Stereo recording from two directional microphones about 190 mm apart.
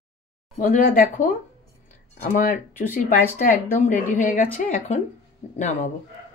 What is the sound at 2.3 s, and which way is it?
Speech, 45° left (ahead or behind).